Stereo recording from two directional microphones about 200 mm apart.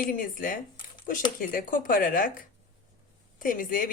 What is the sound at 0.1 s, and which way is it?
A woman's voice, 45° left (ahead or behind).